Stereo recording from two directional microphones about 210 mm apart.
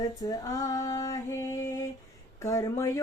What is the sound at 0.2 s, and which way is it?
Female singing, 15° left (ahead or behind).